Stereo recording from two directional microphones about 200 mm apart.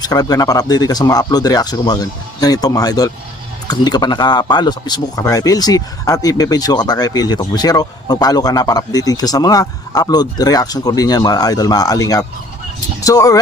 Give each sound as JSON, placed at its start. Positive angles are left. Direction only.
{"t": 0.0, "sound": "speech", "side_deg": 20}